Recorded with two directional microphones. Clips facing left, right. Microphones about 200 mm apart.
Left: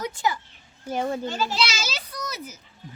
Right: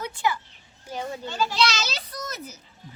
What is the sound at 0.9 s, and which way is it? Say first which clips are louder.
Speech: left 6 dB; 50° left (ahead or behind).